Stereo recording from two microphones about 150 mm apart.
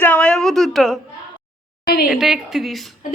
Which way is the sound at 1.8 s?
90° left.